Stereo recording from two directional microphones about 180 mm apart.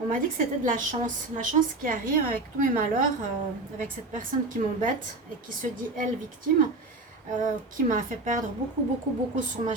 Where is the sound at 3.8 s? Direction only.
45° right (ahead or behind).